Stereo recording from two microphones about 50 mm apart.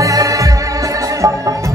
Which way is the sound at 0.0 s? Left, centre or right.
Right.